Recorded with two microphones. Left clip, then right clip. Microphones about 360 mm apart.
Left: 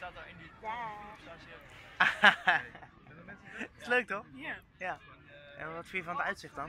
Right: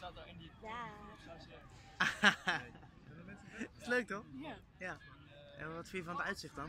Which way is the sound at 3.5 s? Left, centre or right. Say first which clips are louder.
Left 6 dB; centre.